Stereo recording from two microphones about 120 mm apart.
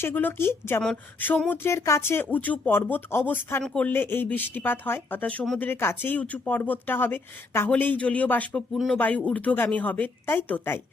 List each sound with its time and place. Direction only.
0.0 s a woman's voice: 15° left (ahead or behind)